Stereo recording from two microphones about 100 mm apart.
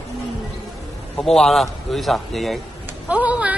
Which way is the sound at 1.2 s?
5° left (ahead or behind).